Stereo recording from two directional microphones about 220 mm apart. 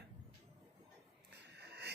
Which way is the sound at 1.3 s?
50° right (ahead or behind).